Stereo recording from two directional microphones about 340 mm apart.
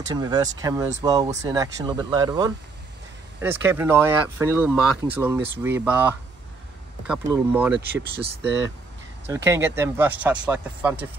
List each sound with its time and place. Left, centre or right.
0.1 s speech: centre
7.1 s speech: centre
8.4 s speech: right
9.3 s speech: centre